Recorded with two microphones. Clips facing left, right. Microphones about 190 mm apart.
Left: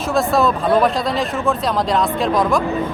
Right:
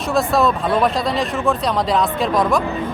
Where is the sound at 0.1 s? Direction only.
Centre (ahead or behind).